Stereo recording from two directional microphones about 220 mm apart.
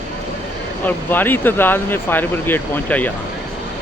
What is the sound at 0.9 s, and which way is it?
Speech, 10° left (ahead or behind).